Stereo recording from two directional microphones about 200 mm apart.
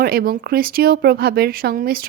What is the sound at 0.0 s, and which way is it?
A woman's voice, 50° right (ahead or behind).